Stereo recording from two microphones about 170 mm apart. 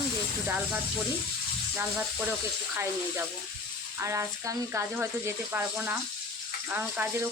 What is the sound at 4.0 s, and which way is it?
Speech, 15° right (ahead or behind).